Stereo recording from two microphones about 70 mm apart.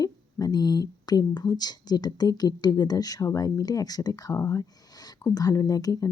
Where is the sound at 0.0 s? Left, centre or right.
Left.